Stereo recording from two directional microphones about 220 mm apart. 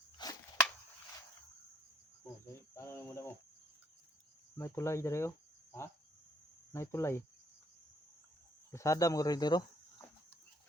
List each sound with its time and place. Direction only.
0.2 s a sound: 20° left (ahead or behind)
2.7 s cricket: 10° left (ahead or behind)
4.5 s speech: 10° left (ahead or behind)
6.7 s speech: 10° left (ahead or behind)
8.7 s speech: 15° left (ahead or behind)